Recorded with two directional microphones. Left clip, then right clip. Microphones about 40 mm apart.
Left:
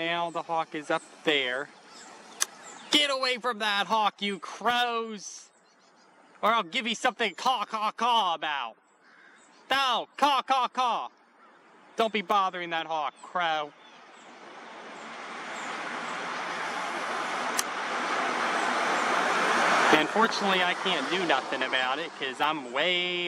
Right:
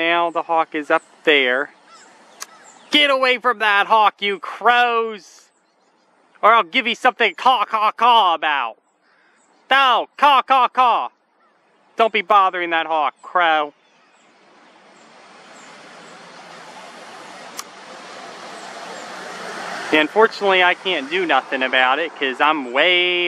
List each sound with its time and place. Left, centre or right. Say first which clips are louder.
0.0 s speech: right 12 dB; right
3.6 s speech: right 12 dB; right
4.6 s speech: right 12 dB; right
6.4 s speech: right 12 dB; right
14.9 s vehicle: left 6 dB; left
20.2 s speech: right 9 dB; right
20.4 s speech: right 10 dB; right